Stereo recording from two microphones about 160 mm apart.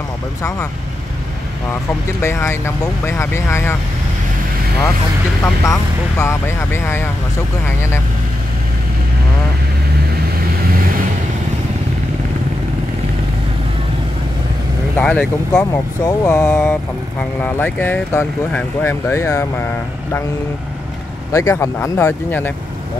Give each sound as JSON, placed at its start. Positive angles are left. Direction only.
{"t": 2.2, "sound": "speech", "side_deg": 15}
{"t": 5.4, "sound": "speech", "side_deg": 20}
{"t": 15.0, "sound": "speech", "side_deg": 10}
{"t": 16.1, "sound": "speech", "side_deg": 20}
{"t": 21.3, "sound": "speech", "side_deg": 20}